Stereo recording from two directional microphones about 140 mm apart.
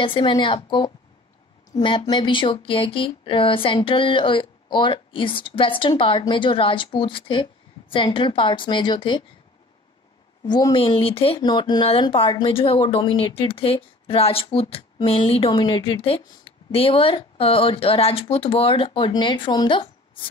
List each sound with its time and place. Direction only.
0.0 s speech: 35° left (ahead or behind)
10.4 s speech: 30° left (ahead or behind)
11.0 s speech: 45° left (ahead or behind)
11.3 s speech: 30° left (ahead or behind)